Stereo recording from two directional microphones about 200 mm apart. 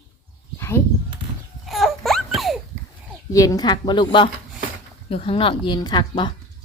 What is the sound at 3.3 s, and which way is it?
A woman's voice, 15° left (ahead or behind).